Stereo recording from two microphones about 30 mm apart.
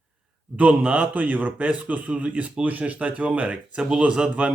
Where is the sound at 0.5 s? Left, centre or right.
Right.